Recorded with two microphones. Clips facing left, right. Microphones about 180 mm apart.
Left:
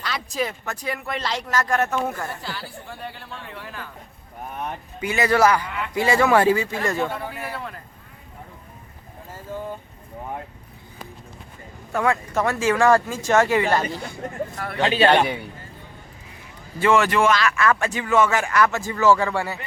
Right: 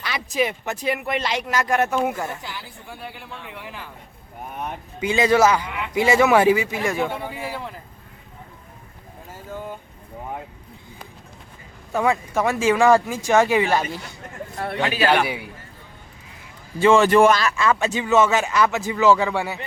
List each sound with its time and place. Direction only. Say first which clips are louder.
0.3 s speech: right 6 dB; 20° right (ahead or behind)
4.9 s speech: right 2 dB; 20° right (ahead or behind)
11.9 s speech: right 1 dB; 15° right (ahead or behind)
14.8 s a man's voice: left 3 dB; 25° left (ahead or behind)
15.2 s speech: left 1 dB; 10° right (ahead or behind)
16.8 s speech: right 3 dB; 25° right (ahead or behind)
17.2 s speech: right 4 dB; 40° right (ahead or behind)
17.6 s speech: right 1 dB; 20° right (ahead or behind)